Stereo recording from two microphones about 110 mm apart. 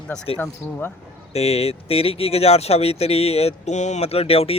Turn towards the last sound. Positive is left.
turn(degrees=65)  # may be behind; listen again after turning